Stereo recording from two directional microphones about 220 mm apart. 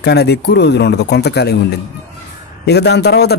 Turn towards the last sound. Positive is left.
turn(degrees=50)  # may be behind; listen again after turning